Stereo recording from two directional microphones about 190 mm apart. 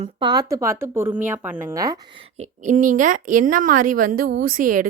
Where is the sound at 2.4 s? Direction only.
40° right (ahead or behind).